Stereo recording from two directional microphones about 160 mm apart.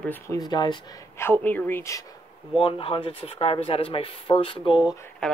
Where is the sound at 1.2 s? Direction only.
10° left (ahead or behind).